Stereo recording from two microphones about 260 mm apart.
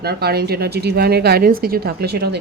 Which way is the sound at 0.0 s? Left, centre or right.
Right.